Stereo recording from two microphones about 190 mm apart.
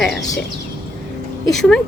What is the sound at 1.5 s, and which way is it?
Speech, centre (ahead or behind).